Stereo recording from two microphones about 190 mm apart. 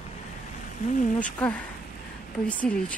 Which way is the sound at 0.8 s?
40° left (ahead or behind).